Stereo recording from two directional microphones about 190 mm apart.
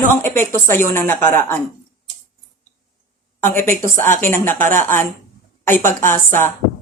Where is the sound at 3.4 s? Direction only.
15° left (ahead or behind).